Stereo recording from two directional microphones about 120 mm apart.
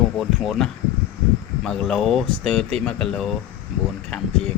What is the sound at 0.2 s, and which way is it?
Speech, centre (ahead or behind).